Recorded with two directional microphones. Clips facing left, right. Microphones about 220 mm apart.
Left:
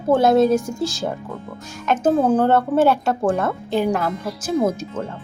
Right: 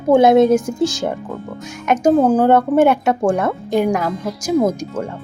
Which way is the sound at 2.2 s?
10° right (ahead or behind).